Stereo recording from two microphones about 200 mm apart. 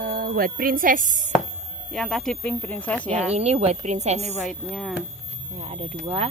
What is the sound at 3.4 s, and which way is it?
Speech, 30° right (ahead or behind).